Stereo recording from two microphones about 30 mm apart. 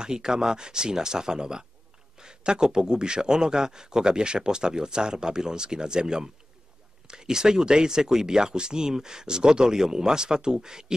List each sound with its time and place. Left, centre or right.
0.0 s a man's voice: right